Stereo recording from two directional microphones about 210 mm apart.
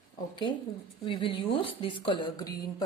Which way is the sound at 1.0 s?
25° left (ahead or behind).